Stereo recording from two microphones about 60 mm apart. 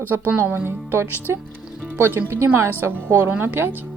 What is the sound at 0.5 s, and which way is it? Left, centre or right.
Speech, right.